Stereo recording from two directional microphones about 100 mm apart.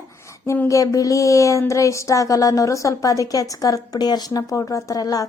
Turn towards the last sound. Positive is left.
turn(degrees=35)  # may be behind; listen again after turning